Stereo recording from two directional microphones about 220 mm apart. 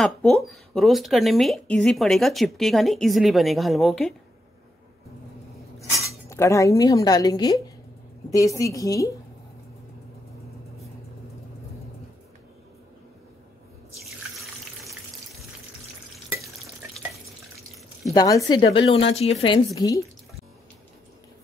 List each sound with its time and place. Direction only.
0.0 s speech: centre (ahead or behind)
6.0 s a woman's voice: 15° left (ahead or behind)
14.4 s water: centre (ahead or behind)
18.1 s a woman's voice: 15° left (ahead or behind)